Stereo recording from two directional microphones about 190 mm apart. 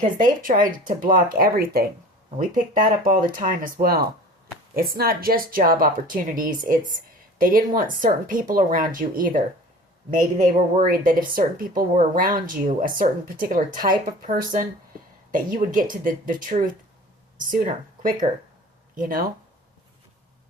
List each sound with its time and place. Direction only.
0.0 s speech: 45° right (ahead or behind)